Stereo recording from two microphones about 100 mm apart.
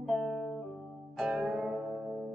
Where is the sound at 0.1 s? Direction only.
Centre (ahead or behind).